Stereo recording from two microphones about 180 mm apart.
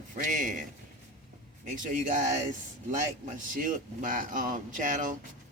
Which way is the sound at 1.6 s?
45° right (ahead or behind).